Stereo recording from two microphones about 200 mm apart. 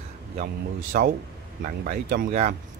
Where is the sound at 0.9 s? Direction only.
45° right (ahead or behind).